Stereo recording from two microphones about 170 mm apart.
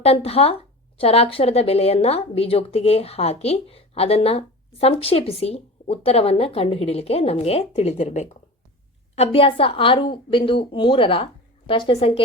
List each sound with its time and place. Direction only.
0.0 s speech: 35° left (ahead or behind)